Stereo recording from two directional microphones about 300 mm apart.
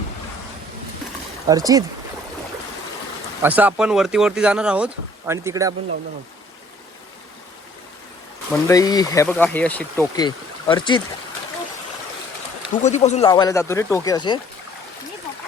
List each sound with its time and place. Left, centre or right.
1.5 s speech: centre
3.4 s speech: centre
8.6 s speech: centre
12.8 s speech: left
13.2 s speech: centre